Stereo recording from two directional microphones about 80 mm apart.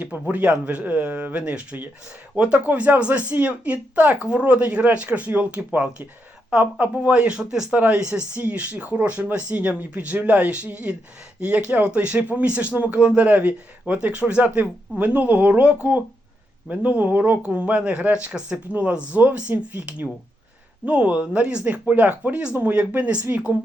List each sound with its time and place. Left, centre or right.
0.0 s speech: centre